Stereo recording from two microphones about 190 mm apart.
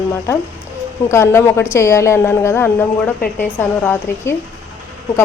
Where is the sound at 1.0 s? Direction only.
15° left (ahead or behind).